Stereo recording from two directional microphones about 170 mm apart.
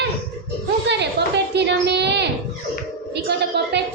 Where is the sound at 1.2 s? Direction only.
75° right (ahead or behind).